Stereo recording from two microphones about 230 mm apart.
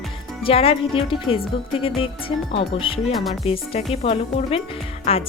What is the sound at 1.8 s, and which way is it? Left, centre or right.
Speech, left.